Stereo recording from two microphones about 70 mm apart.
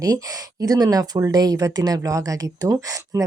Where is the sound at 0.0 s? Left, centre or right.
Right.